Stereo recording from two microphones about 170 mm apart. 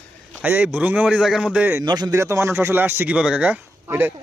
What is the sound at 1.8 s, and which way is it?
Speech, 25° right (ahead or behind).